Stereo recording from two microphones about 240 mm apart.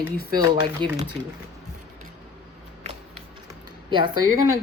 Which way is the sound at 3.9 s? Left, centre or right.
Centre.